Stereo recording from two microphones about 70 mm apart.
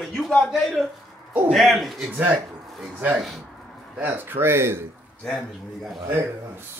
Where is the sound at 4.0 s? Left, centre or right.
Right.